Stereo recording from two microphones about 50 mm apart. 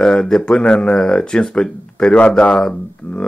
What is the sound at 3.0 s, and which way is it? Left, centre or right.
Speech, left.